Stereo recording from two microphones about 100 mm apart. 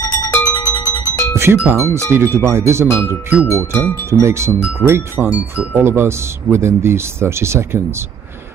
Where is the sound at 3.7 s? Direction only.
15° left (ahead or behind).